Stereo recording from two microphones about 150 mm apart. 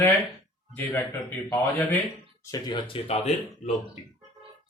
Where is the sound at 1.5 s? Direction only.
20° left (ahead or behind); by 3.3 s 40° left (ahead or behind).